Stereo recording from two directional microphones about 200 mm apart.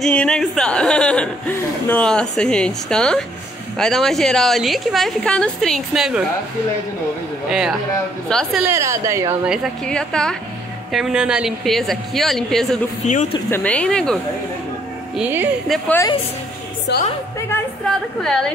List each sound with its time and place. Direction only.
0.0 s a woman's voice: 5° left (ahead or behind)
7.4 s a woman's voice: 5° right (ahead or behind)
8.6 s a woman's voice: 15° right (ahead or behind); by 12.6 s centre (ahead or behind)
13.0 s speech: 35° left (ahead or behind)
13.5 s a woman's voice: 5° left (ahead or behind)
15.1 s a woman's voice: 10° right (ahead or behind)
16.9 s a woman's voice: 60° left (ahead or behind)
17.5 s a sound: 5° left (ahead or behind)